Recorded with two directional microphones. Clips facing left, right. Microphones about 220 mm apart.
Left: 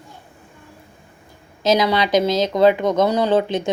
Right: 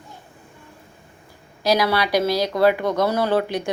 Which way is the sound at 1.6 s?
20° left (ahead or behind).